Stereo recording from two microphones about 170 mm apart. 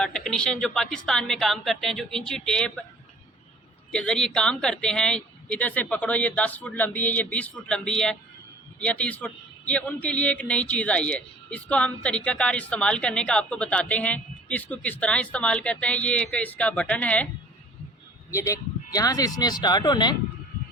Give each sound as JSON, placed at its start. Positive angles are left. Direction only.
{"t": 0.0, "sound": "a woman's voice", "side_deg": 5}
{"t": 3.9, "sound": "a man's voice", "side_deg": 5}
{"t": 18.3, "sound": "speech", "side_deg": 20}